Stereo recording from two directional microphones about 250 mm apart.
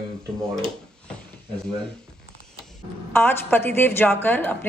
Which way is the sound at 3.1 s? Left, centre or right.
Centre.